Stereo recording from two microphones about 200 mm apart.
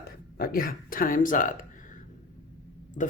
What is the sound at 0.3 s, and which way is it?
Speech, 50° left (ahead or behind).